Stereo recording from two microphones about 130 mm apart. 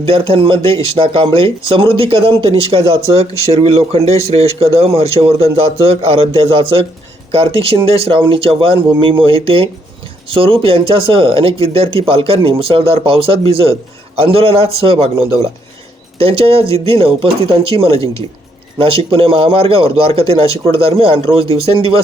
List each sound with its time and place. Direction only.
0.0 s speech: 45° right (ahead or behind)
16.1 s speech: 50° right (ahead or behind)